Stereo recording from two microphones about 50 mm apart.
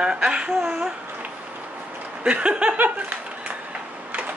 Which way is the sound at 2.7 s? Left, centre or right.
Right.